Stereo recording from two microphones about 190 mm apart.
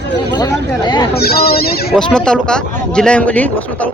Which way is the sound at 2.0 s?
5° left (ahead or behind).